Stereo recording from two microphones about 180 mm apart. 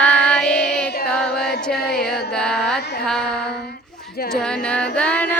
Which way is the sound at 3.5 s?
65° left (ahead or behind).